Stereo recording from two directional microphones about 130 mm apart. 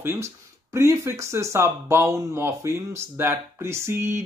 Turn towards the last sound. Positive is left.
turn(degrees=-20)  # may be behind; listen again after turning